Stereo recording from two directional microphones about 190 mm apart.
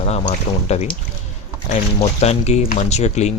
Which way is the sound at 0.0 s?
35° left (ahead or behind).